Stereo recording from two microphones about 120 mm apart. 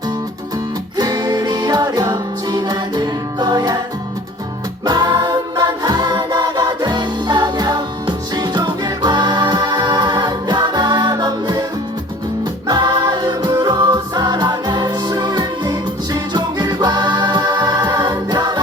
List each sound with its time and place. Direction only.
0.9 s music: 35° right (ahead or behind)
4.9 s music: 35° right (ahead or behind)
12.6 s music: 35° right (ahead or behind)